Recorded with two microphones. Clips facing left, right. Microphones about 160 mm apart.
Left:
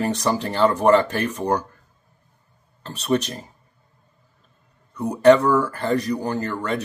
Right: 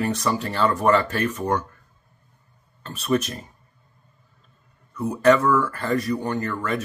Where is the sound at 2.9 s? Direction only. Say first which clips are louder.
Left 1 dB; 30° left (ahead or behind).